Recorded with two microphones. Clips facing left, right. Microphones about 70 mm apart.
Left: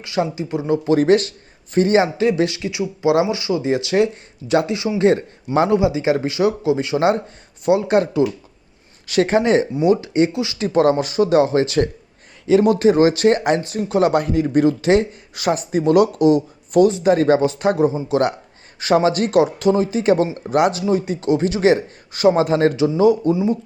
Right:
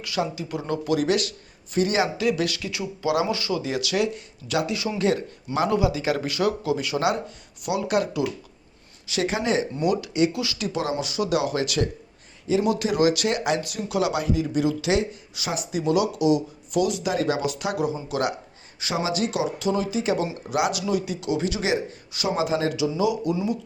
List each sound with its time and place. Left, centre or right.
0.0 s a man's voice: left
0.9 s a man's voice: left
9.0 s speech: left
9.8 s a man's voice: left
10.7 s speech: left
18.8 s speech: left